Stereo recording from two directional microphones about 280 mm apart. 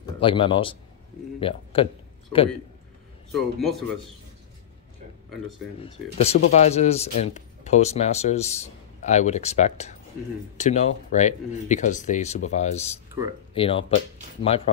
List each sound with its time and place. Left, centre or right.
0.2 s a man's voice: centre
3.3 s a man's voice: centre
5.8 s speech: left